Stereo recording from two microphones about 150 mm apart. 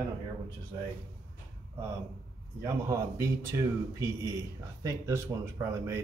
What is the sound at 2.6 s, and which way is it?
A man's voice, 20° right (ahead or behind).